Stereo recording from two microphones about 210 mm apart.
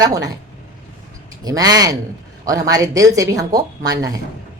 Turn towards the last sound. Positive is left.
turn(degrees=-15)  # may be behind; listen again after turning